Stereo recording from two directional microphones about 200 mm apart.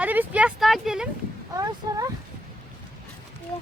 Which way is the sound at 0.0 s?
10° right (ahead or behind).